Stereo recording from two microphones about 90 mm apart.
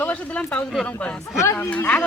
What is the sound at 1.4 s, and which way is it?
Speech, 25° left (ahead or behind).